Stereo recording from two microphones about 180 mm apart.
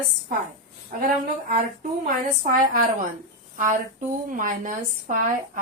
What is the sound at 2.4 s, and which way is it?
Speech, 50° right (ahead or behind).